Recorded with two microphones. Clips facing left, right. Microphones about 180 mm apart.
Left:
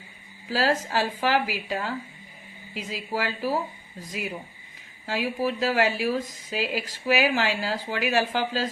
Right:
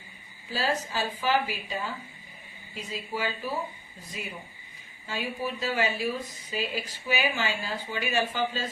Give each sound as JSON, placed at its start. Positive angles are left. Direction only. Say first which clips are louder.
{"t": 0.5, "sound": "speech", "louder": "left 5 dB", "side_deg": 90}
{"t": 5.0, "sound": "speech", "louder": "left 6 dB", "side_deg": 90}